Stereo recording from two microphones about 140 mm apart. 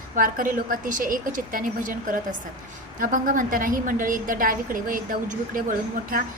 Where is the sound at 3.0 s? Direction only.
75° right (ahead or behind).